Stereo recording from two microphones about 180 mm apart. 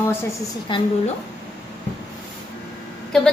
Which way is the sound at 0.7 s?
25° left (ahead or behind).